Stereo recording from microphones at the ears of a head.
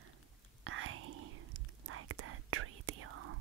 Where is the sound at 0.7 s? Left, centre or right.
Right.